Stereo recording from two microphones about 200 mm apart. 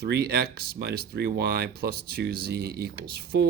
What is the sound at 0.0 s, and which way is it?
Speech, 50° right (ahead or behind).